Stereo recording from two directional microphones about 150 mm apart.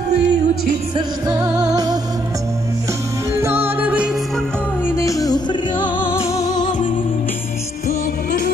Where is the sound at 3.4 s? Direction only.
15° right (ahead or behind).